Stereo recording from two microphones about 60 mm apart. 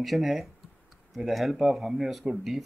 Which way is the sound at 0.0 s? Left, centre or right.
Centre.